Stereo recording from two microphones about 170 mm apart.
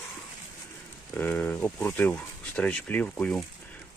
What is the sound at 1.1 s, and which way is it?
Speech, 10° left (ahead or behind).